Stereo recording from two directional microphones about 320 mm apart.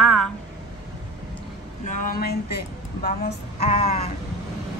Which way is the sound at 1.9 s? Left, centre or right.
Left.